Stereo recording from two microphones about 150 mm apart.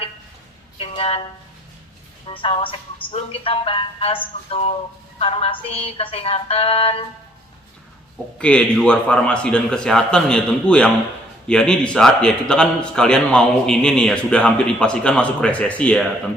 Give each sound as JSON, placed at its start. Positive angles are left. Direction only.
{"t": 0.8, "sound": "a sound", "side_deg": 40}
{"t": 2.2, "sound": "speech", "side_deg": 35}
{"t": 8.4, "sound": "a man's voice", "side_deg": 5}